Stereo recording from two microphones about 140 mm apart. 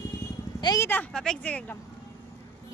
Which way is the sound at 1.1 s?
5° left (ahead or behind).